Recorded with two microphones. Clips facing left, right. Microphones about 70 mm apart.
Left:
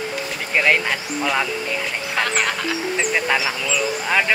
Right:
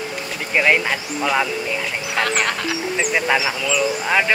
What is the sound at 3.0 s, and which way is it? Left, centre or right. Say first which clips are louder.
Speech: right 2 dB; centre.